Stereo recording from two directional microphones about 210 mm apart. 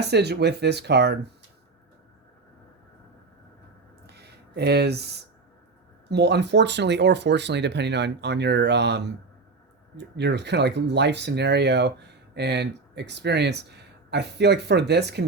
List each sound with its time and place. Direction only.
0.0 s speech: 50° right (ahead or behind)
4.0 s a sound: 50° right (ahead or behind)
6.1 s speech: 55° right (ahead or behind)